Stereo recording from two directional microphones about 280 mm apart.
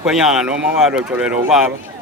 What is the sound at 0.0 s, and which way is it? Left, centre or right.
Speech, centre.